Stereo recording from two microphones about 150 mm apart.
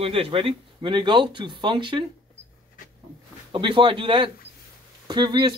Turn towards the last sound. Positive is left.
turn(degrees=-30)  # may be behind; listen again after turning